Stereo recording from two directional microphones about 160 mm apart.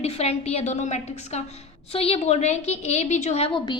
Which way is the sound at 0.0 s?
40° left (ahead or behind).